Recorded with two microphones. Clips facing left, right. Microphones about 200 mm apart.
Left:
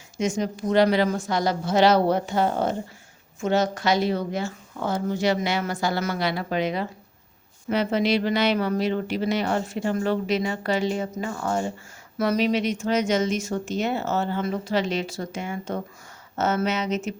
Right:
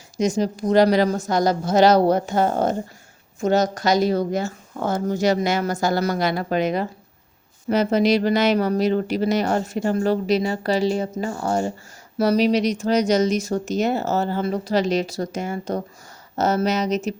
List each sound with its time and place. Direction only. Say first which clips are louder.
0.2 s speech: right 4 dB; 35° right (ahead or behind)